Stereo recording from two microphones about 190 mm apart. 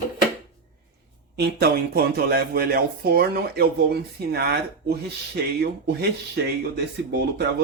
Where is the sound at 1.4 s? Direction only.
55° right (ahead or behind).